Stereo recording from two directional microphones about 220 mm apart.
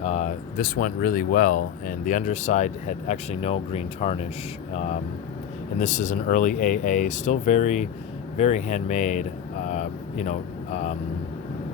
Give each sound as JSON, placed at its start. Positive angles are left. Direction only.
{"t": 0.0, "sound": "speech", "side_deg": 30}
{"t": 9.6, "sound": "vehicle", "side_deg": 30}